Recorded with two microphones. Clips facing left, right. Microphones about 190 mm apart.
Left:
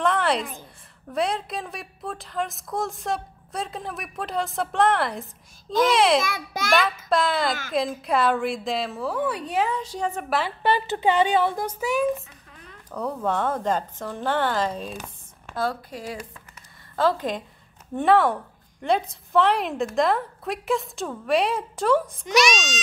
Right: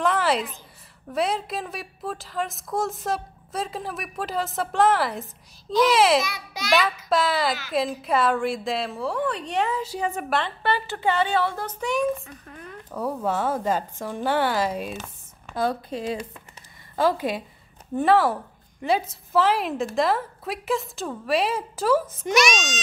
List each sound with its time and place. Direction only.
0.0 s a sound: centre (ahead or behind)
1.1 s a woman's voice: centre (ahead or behind)
6.2 s a child's voice: 50° left (ahead or behind)
7.1 s a woman's voice: centre (ahead or behind)
10.4 s speech: 15° left (ahead or behind)
11.8 s a woman's voice: 5° left (ahead or behind)
15.5 s a woman's voice: 20° right (ahead or behind); by 22.2 s 5° right (ahead or behind)
22.2 s a child's voice: 50° right (ahead or behind)